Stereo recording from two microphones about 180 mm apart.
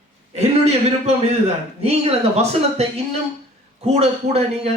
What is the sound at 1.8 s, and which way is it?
Speech, 35° right (ahead or behind).